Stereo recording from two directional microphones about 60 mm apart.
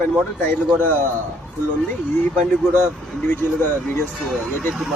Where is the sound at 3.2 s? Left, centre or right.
Left.